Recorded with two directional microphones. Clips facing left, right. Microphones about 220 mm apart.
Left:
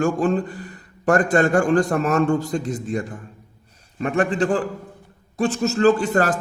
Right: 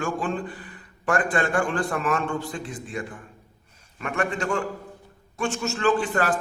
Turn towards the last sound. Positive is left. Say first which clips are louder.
# left 6 dB
turn(degrees=40)  # may be behind; listen again after turning